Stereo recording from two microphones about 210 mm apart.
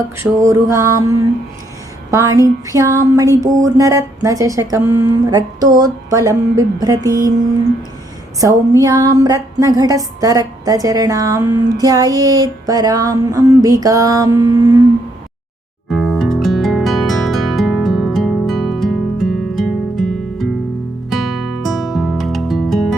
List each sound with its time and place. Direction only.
0.2 s a woman's voice: 15° right (ahead or behind)
7.1 s music: 15° left (ahead or behind)
8.4 s a woman's voice: 15° right (ahead or behind)
15.9 s music: centre (ahead or behind)
21.6 s music: centre (ahead or behind)